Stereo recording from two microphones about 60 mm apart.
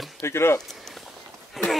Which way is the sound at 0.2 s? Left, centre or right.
Left.